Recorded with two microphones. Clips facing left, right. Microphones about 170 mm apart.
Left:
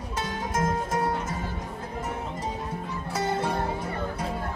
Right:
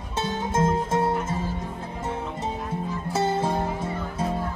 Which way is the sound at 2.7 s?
25° right (ahead or behind).